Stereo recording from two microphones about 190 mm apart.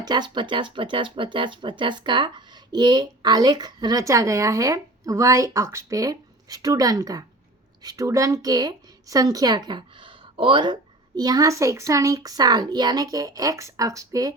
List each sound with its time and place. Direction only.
0.0 s a woman's voice: 25° right (ahead or behind)